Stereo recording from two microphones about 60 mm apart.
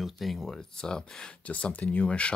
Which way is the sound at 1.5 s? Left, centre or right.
Left.